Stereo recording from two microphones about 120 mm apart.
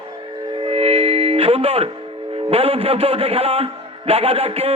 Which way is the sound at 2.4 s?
50° right (ahead or behind).